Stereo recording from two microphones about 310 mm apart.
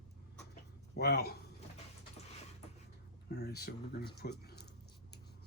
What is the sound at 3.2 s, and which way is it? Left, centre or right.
Speech, left.